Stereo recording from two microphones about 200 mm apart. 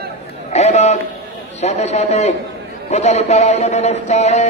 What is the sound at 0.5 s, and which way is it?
A man's voice, 35° left (ahead or behind).